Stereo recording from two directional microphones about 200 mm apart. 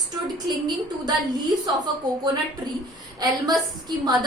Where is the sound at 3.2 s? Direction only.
20° right (ahead or behind).